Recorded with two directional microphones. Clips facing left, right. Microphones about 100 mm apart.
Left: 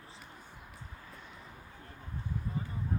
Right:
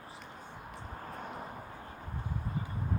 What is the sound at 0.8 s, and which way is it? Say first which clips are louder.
Vehicle: right 9 dB; 50° right (ahead or behind).